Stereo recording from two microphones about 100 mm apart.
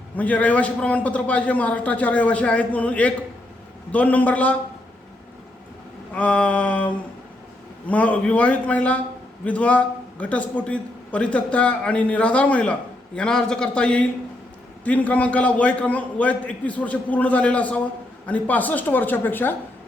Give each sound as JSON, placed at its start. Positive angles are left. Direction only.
{"t": 0.2, "sound": "a man's voice", "side_deg": 15}
{"t": 6.1, "sound": "a man's voice", "side_deg": 15}